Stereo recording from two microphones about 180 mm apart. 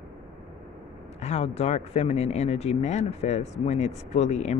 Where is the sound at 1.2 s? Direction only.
35° left (ahead or behind).